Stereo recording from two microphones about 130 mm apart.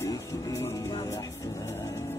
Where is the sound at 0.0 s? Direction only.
25° left (ahead or behind).